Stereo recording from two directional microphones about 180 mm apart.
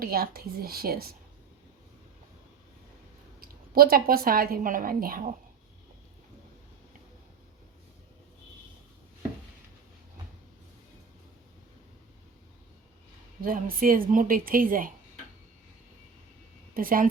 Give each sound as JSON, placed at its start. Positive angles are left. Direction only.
{"t": 0.0, "sound": "a woman's voice", "side_deg": -55}
{"t": 3.4, "sound": "a woman's voice", "side_deg": -55}
{"t": 13.4, "sound": "a woman's voice", "side_deg": -50}
{"t": 16.7, "sound": "a woman's voice", "side_deg": -50}